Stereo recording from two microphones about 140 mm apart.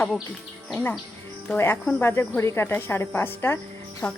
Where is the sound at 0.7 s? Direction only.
15° left (ahead or behind).